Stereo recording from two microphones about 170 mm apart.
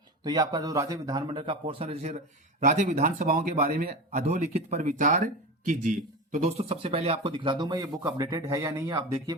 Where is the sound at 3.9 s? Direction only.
45° right (ahead or behind).